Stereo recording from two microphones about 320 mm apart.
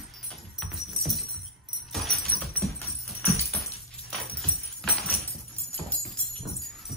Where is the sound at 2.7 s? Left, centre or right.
Centre.